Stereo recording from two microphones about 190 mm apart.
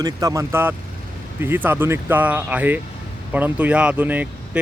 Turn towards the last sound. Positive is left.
turn(degrees=-10)  # may be behind; listen again after turning